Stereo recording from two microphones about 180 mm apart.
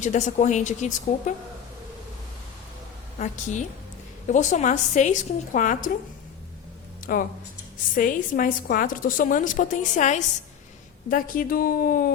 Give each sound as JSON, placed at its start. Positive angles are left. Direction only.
{"t": 0.0, "sound": "speech", "side_deg": 40}
{"t": 3.2, "sound": "a woman's voice", "side_deg": 45}
{"t": 7.0, "sound": "a woman's voice", "side_deg": 50}